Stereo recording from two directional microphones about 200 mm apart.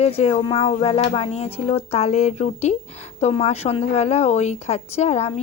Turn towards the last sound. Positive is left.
turn(degrees=30)  # may be behind; listen again after turning